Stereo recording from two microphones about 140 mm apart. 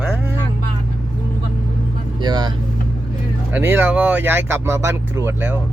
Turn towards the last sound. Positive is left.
turn(degrees=-15)  # may be behind; listen again after turning